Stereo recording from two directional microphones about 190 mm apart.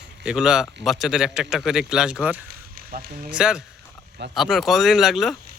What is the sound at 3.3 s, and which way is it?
Speech, 5° right (ahead or behind).